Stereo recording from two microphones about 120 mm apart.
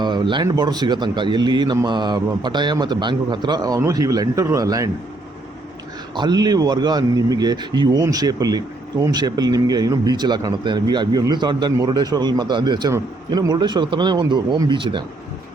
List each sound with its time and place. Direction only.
0.0 s a sound: 40° right (ahead or behind)
0.4 s speech: 35° right (ahead or behind)
6.1 s speech: 35° right (ahead or behind)